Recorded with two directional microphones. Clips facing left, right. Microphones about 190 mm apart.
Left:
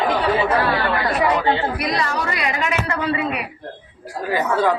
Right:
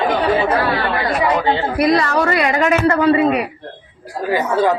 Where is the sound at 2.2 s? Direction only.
50° right (ahead or behind).